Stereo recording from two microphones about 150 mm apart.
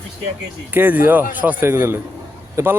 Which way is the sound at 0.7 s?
10° right (ahead or behind).